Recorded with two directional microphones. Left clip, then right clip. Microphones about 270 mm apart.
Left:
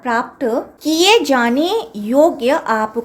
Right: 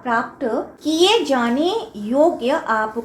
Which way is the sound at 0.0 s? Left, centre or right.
Left.